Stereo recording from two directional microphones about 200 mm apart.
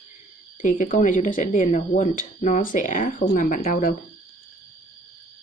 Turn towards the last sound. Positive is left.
turn(degrees=45)  # may be behind; listen again after turning